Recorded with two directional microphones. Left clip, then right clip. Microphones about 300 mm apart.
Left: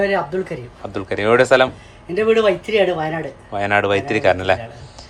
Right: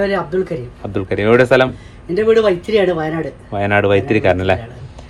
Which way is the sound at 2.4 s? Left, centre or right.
Centre.